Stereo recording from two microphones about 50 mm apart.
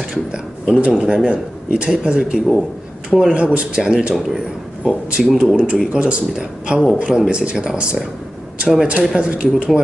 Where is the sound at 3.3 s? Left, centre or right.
Right.